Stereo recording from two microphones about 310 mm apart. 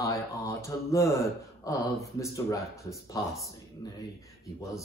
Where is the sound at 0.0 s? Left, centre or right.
Centre.